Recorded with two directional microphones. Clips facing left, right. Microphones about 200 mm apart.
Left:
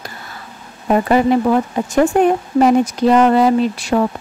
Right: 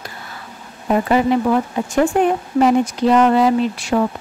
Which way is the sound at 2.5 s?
40° left (ahead or behind).